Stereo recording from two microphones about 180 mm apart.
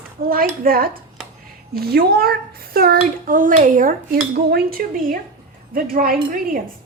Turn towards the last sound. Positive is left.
turn(degrees=-55)  # may be behind; listen again after turning